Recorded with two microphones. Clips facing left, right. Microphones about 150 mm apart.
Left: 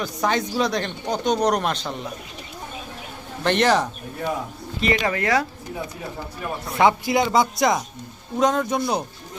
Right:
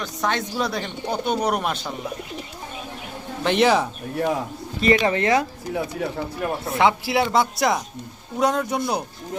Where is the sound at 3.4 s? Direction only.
5° right (ahead or behind).